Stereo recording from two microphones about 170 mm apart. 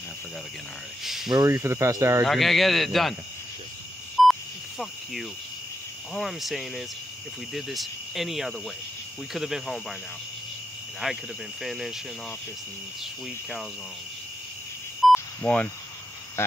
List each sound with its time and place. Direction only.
1.0 s speech: centre (ahead or behind)
1.3 s speech: 15° right (ahead or behind)
2.2 s speech: centre (ahead or behind)
4.2 s a sound: centre (ahead or behind)
6.1 s speech: centre (ahead or behind)
11.0 s speech: centre (ahead or behind)
15.4 s speech: 10° left (ahead or behind)